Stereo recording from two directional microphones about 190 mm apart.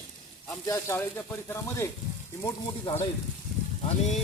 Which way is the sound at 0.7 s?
15° left (ahead or behind).